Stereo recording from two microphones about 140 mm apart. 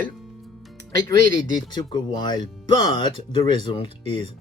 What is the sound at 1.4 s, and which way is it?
Speech, 30° left (ahead or behind).